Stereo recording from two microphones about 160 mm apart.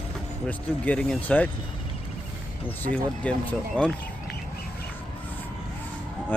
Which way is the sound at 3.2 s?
10° left (ahead or behind).